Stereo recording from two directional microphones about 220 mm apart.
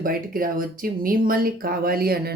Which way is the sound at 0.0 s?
40° right (ahead or behind).